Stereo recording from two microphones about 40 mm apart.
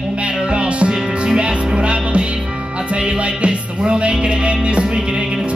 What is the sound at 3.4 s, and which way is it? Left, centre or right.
Music, right.